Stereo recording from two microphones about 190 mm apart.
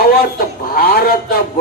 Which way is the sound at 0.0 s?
55° left (ahead or behind).